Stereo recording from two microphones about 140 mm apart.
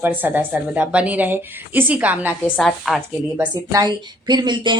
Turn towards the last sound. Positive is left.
turn(degrees=-35)  # may be behind; listen again after turning